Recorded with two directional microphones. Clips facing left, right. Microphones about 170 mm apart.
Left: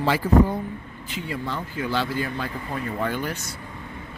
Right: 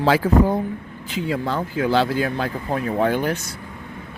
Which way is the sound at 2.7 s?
55° right (ahead or behind).